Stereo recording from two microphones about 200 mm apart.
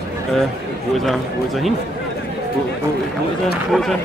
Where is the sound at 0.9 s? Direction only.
Centre (ahead or behind).